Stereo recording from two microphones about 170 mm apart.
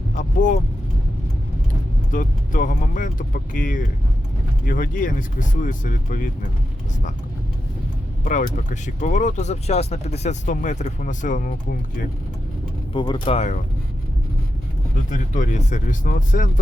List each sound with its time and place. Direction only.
0.2 s speech: 50° left (ahead or behind)
2.0 s speech: 50° left (ahead or behind)
8.2 s speech: 50° left (ahead or behind)
12.9 s speech: 25° left (ahead or behind)
15.1 s speech: 45° left (ahead or behind)